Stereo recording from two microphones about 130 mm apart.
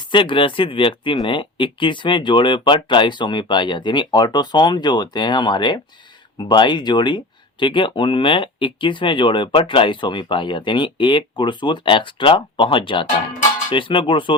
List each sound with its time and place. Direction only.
0.1 s speech: 40° left (ahead or behind)